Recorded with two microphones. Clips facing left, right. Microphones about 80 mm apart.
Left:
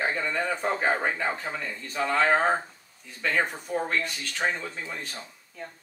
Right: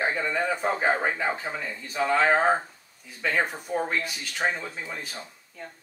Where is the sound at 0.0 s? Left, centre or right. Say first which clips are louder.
Right 1 dB; centre.